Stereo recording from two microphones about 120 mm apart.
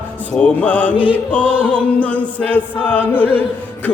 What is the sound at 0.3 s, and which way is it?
Music, 10° left (ahead or behind).